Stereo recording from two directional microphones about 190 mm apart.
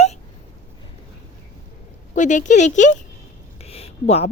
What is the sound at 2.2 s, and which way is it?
A woman's voice, 40° left (ahead or behind).